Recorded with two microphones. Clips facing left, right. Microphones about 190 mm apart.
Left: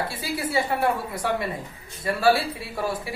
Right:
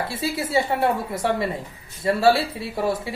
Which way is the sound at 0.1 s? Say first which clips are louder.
Right 3 dB; 25° right (ahead or behind).